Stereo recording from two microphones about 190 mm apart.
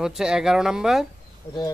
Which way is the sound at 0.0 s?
5° right (ahead or behind).